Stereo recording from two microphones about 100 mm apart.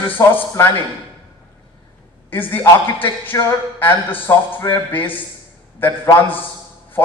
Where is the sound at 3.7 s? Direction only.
20° left (ahead or behind).